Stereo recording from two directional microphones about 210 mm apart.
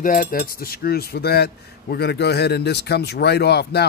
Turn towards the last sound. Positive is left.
turn(degrees=50)  # may be behind; listen again after turning